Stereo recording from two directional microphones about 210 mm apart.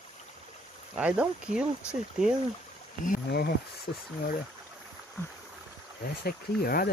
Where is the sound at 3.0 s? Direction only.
45° left (ahead or behind).